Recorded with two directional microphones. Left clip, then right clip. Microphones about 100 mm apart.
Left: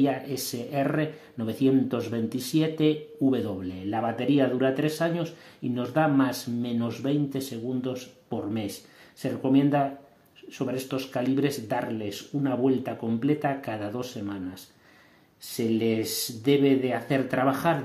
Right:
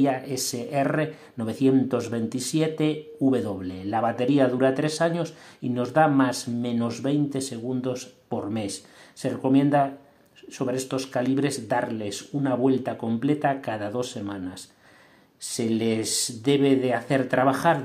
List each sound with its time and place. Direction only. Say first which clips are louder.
0.0 s speech: right 2 dB; 25° right (ahead or behind)